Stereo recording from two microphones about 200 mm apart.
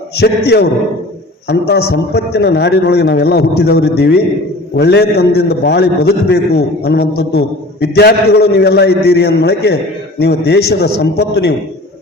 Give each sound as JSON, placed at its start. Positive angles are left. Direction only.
{"t": 0.2, "sound": "a man's voice", "side_deg": 55}